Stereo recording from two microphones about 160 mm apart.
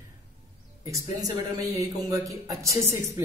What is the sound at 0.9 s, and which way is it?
A woman's voice, 20° right (ahead or behind).